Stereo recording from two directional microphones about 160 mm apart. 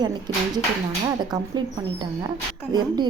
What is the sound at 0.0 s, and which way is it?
A woman's voice, 25° right (ahead or behind).